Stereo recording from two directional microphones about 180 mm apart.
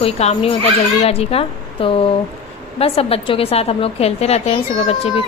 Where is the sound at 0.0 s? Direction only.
35° left (ahead or behind).